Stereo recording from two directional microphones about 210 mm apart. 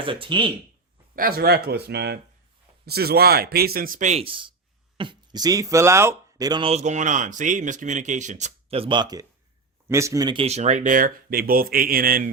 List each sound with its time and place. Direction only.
0.0 s speech: 25° right (ahead or behind)
1.1 s speech: 45° right (ahead or behind)